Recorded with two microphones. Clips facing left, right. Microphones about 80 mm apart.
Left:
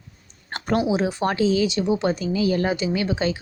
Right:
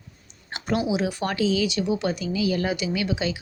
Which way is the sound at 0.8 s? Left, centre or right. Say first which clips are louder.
Left 4 dB; left.